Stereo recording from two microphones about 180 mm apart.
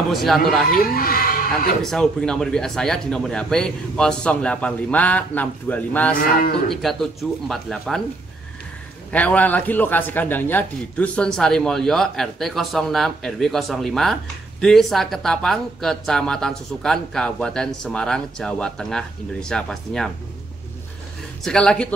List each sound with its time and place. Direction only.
0.1 s speech: centre (ahead or behind)
0.7 s speech: 55° left (ahead or behind)
1.8 s speech: 5° left (ahead or behind)
9.1 s speech: 10° left (ahead or behind)
21.5 s speech: 5° left (ahead or behind)